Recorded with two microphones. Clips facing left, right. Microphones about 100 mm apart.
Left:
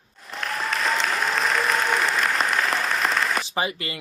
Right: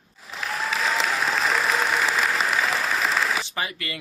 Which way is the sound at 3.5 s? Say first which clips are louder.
Left 4 dB; 20° left (ahead or behind).